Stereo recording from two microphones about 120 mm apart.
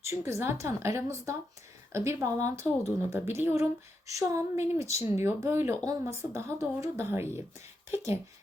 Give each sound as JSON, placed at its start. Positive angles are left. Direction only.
{"t": 0.0, "sound": "speech", "side_deg": -20}